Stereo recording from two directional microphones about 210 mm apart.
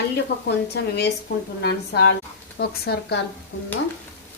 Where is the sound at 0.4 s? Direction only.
50° left (ahead or behind).